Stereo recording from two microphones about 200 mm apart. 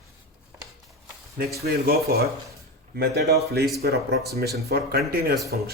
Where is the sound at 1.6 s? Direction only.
50° right (ahead or behind).